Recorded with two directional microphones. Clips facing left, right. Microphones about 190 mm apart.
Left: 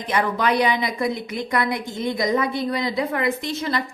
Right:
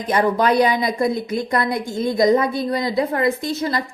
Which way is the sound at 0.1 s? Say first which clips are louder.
Right 4 dB; 40° right (ahead or behind).